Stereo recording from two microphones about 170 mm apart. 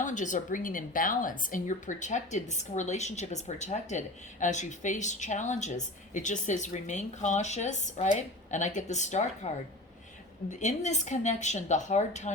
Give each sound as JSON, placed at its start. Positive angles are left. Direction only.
{"t": 0.0, "sound": "a woman's voice", "side_deg": 50}
{"t": 10.5, "sound": "a woman's voice", "side_deg": 45}